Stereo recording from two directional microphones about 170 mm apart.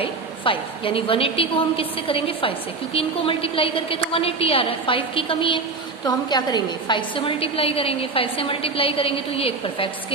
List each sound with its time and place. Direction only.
0.0 s a woman's voice: 30° left (ahead or behind)